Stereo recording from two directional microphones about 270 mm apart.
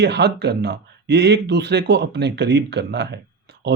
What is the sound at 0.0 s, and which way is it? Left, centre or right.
Speech, right.